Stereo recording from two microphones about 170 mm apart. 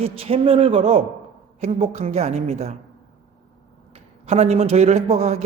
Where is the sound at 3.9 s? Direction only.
35° right (ahead or behind).